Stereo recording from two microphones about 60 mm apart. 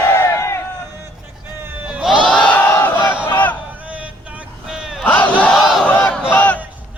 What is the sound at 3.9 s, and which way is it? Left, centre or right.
Vehicle, right.